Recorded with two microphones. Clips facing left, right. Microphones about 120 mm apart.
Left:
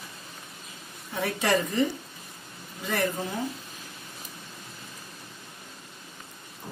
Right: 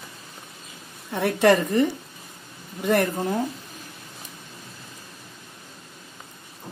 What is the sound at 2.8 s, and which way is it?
Speech, 55° right (ahead or behind).